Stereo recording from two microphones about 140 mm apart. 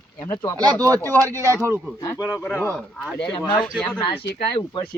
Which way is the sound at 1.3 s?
20° right (ahead or behind).